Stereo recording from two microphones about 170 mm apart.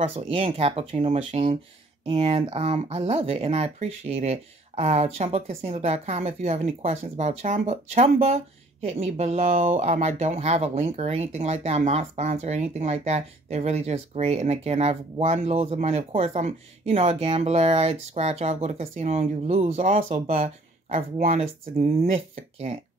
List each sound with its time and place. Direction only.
0.0 s speech: 35° right (ahead or behind)